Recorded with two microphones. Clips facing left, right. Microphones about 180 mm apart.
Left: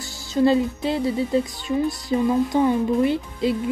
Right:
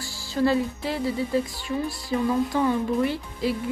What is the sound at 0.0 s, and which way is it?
Speech, 20° left (ahead or behind).